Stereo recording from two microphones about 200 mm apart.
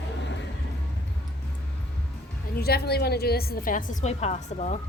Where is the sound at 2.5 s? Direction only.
50° left (ahead or behind).